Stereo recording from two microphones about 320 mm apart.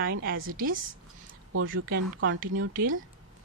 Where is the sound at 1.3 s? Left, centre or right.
Right.